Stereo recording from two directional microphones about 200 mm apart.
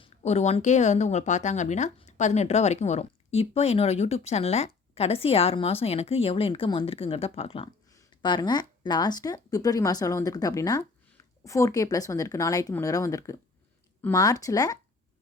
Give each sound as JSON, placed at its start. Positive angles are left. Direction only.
{"t": 0.0, "sound": "a woman's voice", "side_deg": 30}